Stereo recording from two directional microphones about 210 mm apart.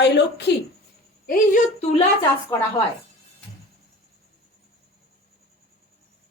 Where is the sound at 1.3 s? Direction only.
35° left (ahead or behind).